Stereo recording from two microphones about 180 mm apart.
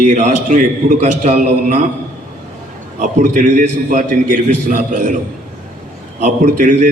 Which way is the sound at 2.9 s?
40° right (ahead or behind).